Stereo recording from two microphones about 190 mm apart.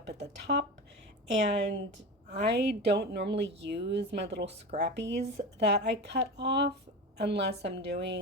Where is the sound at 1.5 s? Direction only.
30° right (ahead or behind).